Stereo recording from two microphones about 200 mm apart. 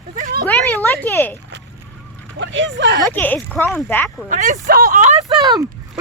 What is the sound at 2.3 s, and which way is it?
Vehicle, 65° right (ahead or behind).